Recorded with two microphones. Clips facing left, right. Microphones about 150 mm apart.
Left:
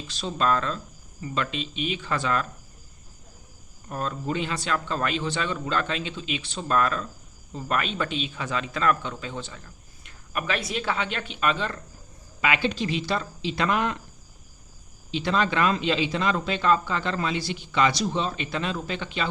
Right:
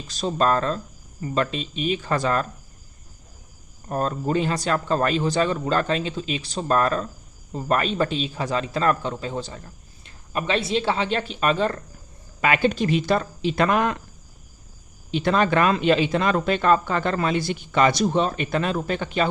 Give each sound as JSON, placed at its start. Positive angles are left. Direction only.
{"t": 0.1, "sound": "speech", "side_deg": -40}
{"t": 3.8, "sound": "speech", "side_deg": -40}
{"t": 15.1, "sound": "speech", "side_deg": -50}